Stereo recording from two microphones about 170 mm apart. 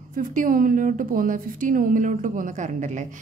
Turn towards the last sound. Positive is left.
turn(degrees=-45)  # may be behind; listen again after turning